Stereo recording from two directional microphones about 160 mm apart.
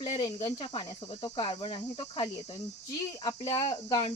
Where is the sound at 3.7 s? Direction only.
25° left (ahead or behind).